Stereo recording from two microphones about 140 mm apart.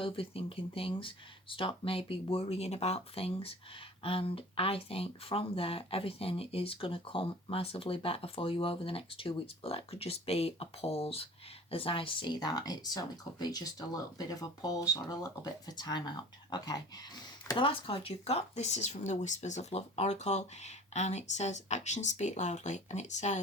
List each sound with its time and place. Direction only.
0.0 s speech: 40° left (ahead or behind)
17.5 s speech: 40° left (ahead or behind); by 23.4 s 55° left (ahead or behind)